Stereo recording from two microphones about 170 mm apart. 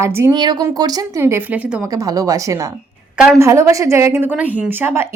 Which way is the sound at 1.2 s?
10° right (ahead or behind).